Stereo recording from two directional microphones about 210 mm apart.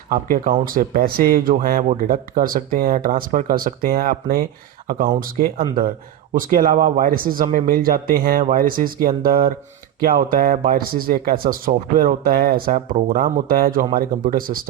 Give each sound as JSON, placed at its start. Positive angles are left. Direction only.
{"t": 0.1, "sound": "speech", "side_deg": -45}